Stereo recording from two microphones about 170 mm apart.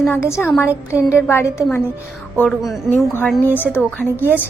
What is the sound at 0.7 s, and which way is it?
Speech, 10° right (ahead or behind).